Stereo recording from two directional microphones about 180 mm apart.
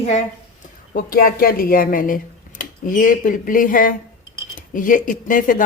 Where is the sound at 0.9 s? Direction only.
55° left (ahead or behind).